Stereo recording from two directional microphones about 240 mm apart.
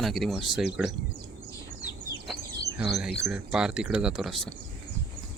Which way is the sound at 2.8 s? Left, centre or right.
Centre.